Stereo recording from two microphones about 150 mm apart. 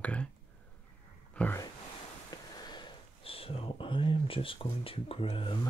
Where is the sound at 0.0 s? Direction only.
10° left (ahead or behind).